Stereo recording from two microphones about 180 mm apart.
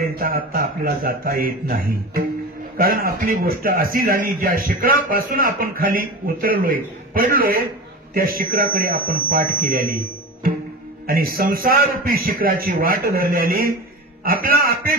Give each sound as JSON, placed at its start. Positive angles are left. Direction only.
{"t": 0.1, "sound": "a man's voice", "side_deg": -55}